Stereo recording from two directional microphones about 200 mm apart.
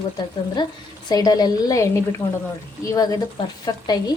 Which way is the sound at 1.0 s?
20° left (ahead or behind).